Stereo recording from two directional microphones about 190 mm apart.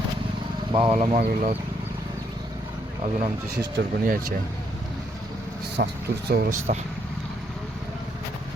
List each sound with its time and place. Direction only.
0.7 s speech: 30° right (ahead or behind)
3.0 s speech: 35° right (ahead or behind)
3.8 s speech: 50° right (ahead or behind)
5.7 s speech: 60° right (ahead or behind)